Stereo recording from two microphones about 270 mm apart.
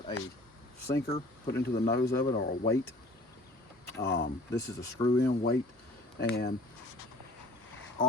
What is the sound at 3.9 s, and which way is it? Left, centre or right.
Speech, left.